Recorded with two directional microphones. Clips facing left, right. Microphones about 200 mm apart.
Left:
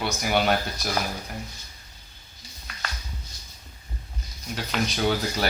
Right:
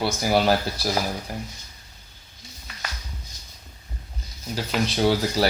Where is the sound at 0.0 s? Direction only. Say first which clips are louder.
Right 3 dB; 30° right (ahead or behind).